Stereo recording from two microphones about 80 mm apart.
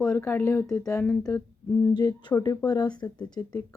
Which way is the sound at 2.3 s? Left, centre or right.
Left.